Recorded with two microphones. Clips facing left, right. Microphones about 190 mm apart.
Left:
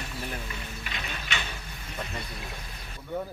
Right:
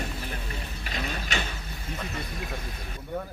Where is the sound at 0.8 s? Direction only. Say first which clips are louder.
Right 7 dB; 40° right (ahead or behind).